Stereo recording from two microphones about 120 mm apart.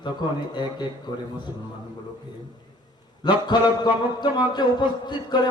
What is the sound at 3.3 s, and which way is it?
Speech, 40° left (ahead or behind).